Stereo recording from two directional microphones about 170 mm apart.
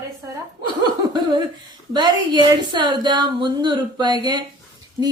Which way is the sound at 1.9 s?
25° right (ahead or behind).